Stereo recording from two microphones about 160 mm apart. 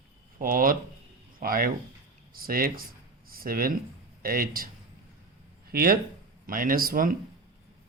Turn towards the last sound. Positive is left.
turn(degrees=-65)  # may be behind; listen again after turning